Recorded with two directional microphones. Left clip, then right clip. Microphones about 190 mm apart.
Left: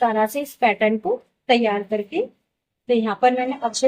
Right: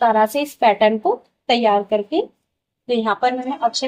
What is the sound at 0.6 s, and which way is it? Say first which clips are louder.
Speech: right 4 dB; 30° right (ahead or behind).